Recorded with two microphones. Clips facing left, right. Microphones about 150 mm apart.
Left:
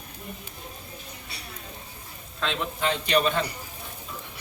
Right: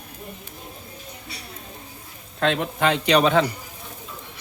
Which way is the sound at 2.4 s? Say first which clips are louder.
Right 6 dB; 60° right (ahead or behind).